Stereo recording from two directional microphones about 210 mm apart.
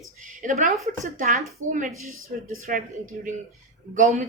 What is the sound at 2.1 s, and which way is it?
Speech, 75° right (ahead or behind).